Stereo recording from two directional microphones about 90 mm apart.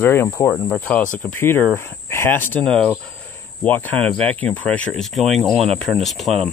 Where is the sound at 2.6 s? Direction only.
10° left (ahead or behind).